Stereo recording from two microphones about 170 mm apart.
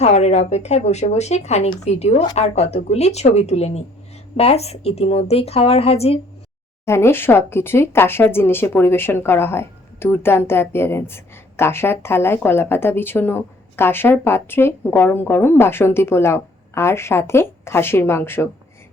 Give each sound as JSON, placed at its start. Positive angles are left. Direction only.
{"t": 0.0, "sound": "a woman's voice", "side_deg": 40}
{"t": 6.8, "sound": "speech", "side_deg": 15}